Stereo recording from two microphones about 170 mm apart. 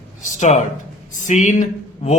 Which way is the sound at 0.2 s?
45° left (ahead or behind).